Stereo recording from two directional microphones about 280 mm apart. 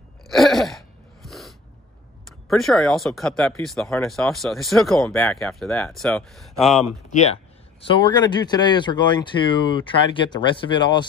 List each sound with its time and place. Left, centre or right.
0.3 s a sound: centre
1.2 s snort: centre
2.2 s speech: centre
6.8 s speech: left